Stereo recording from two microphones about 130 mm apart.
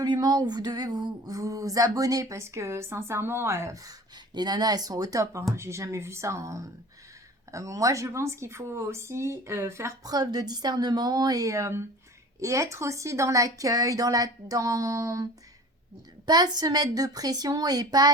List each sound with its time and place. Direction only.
0.0 s speech: 30° right (ahead or behind)